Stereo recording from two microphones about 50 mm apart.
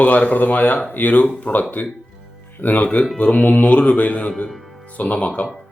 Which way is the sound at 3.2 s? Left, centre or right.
Left.